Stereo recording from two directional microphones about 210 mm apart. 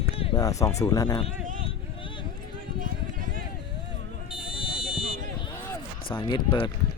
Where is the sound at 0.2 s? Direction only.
25° left (ahead or behind).